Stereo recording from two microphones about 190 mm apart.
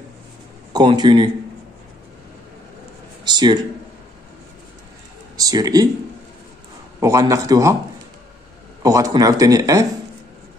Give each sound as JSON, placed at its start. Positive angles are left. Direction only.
{"t": 0.7, "sound": "speech", "side_deg": -25}
{"t": 3.3, "sound": "a sound", "side_deg": -25}
{"t": 5.4, "sound": "speech", "side_deg": -20}
{"t": 7.0, "sound": "speech", "side_deg": -15}
{"t": 8.8, "sound": "speech", "side_deg": -15}